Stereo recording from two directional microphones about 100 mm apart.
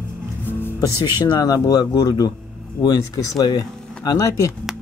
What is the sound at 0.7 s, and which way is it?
Speech, 45° left (ahead or behind).